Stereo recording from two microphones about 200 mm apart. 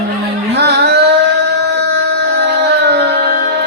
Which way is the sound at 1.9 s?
55° right (ahead or behind).